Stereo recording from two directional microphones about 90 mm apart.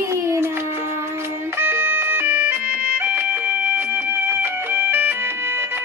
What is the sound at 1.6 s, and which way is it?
Music, 25° right (ahead or behind).